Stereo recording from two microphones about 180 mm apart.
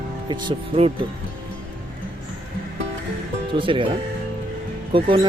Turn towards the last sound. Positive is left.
turn(degrees=-30)  # may be behind; listen again after turning